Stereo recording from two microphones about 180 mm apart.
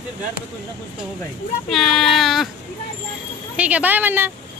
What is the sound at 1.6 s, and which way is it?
Speech, centre (ahead or behind).